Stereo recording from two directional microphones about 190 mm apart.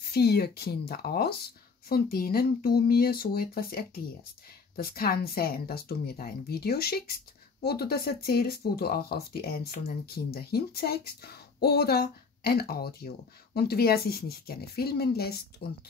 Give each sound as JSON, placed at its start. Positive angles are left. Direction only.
{"t": 0.1, "sound": "speech", "side_deg": 55}